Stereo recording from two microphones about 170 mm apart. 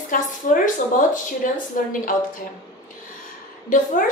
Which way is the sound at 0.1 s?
55° left (ahead or behind).